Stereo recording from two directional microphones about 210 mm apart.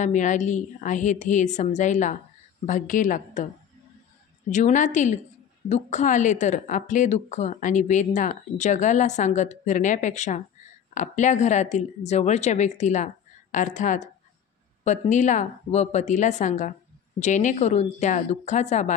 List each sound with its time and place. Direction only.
0.0 s speech: 35° left (ahead or behind)
4.5 s speech: 35° left (ahead or behind)